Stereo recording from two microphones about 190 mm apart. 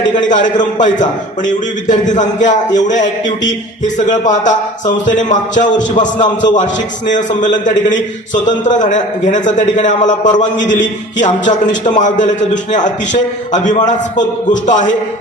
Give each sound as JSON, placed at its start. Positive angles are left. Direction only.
{"t": 0.2, "sound": "speech", "side_deg": 40}
{"t": 13.5, "sound": "speech", "side_deg": 40}